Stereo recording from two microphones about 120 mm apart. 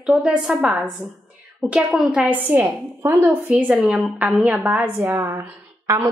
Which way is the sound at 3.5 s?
10° right (ahead or behind).